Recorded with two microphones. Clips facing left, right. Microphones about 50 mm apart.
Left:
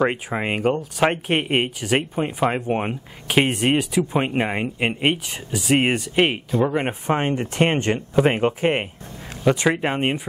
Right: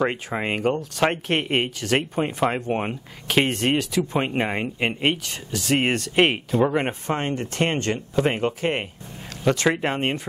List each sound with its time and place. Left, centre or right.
0.0 s speech: centre
6.1 s speech: centre
6.9 s speech: centre
9.4 s speech: centre